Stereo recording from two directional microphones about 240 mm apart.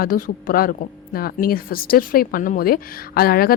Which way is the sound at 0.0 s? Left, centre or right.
Left.